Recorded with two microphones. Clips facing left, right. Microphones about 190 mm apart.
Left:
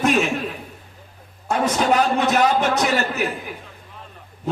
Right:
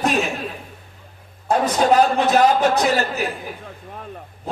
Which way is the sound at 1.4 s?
35° right (ahead or behind).